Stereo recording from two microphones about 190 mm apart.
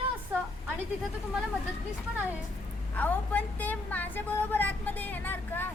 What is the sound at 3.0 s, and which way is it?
Speech, 10° left (ahead or behind).